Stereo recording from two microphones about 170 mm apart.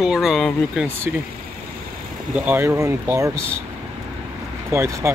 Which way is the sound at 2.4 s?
15° right (ahead or behind).